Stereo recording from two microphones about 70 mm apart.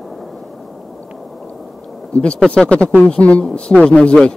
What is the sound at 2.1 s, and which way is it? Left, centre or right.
A man's voice, centre.